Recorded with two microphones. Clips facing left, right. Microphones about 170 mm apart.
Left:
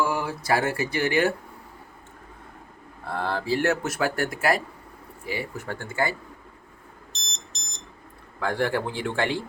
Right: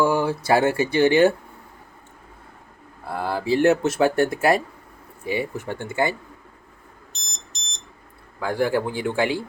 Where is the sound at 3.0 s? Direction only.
5° right (ahead or behind).